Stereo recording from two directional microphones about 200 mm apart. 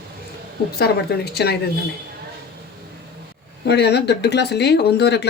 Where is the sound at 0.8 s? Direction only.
55° left (ahead or behind).